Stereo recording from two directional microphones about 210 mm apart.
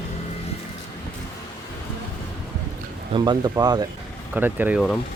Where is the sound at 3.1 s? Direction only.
20° right (ahead or behind); by 5.0 s centre (ahead or behind).